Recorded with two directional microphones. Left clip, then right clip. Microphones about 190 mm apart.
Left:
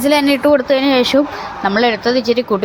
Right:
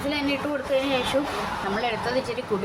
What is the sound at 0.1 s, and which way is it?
Speech, 50° left (ahead or behind).